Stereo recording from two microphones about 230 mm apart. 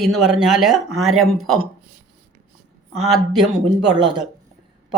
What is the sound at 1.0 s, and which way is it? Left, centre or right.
Speech, right.